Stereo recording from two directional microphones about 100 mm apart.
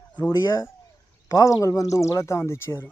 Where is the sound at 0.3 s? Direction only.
40° left (ahead or behind); by 2.9 s 25° left (ahead or behind).